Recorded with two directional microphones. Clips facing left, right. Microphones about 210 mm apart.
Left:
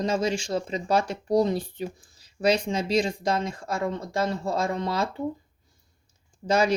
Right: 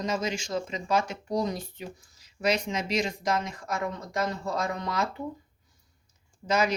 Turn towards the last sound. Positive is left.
turn(degrees=30)  # may be behind; listen again after turning